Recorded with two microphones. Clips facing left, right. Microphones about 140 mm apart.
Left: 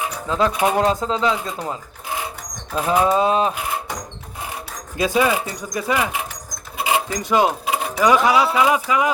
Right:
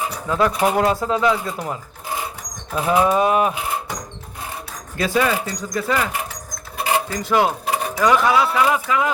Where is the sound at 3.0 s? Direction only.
20° left (ahead or behind).